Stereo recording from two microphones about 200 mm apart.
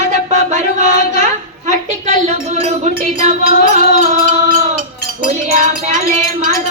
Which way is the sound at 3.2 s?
35° right (ahead or behind).